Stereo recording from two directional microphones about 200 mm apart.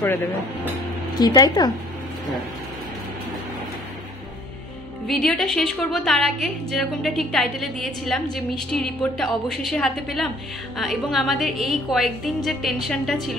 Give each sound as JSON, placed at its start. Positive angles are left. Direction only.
{"t": 1.2, "sound": "speech", "side_deg": 20}
{"t": 5.0, "sound": "a woman's voice", "side_deg": 0}